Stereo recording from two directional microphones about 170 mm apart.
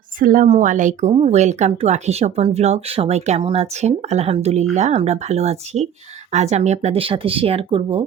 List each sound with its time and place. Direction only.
0.2 s speech: 50° right (ahead or behind); by 8.0 s 30° right (ahead or behind)